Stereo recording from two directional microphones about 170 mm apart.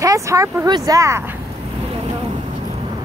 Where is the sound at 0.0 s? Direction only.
20° right (ahead or behind).